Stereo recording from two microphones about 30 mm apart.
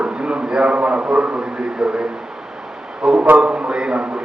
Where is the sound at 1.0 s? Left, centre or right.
Right.